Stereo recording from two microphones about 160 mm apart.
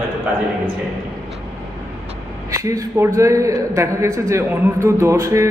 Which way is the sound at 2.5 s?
20° right (ahead or behind).